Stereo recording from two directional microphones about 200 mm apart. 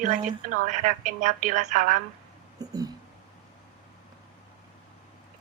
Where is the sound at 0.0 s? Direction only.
40° right (ahead or behind).